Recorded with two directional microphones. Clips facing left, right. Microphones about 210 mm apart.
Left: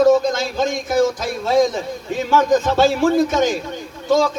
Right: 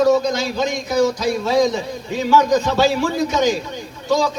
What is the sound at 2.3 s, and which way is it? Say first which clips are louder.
A man's voice: left 1 dB; 50° left (ahead or behind).